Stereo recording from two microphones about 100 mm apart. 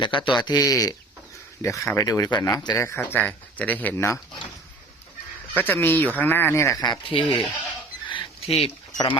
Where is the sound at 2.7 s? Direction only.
25° left (ahead or behind).